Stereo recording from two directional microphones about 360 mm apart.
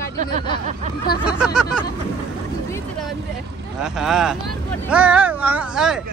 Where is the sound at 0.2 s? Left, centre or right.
Centre.